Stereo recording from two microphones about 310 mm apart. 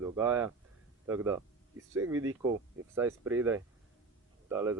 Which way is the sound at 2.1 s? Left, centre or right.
Right.